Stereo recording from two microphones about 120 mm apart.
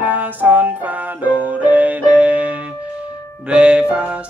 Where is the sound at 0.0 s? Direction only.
15° right (ahead or behind).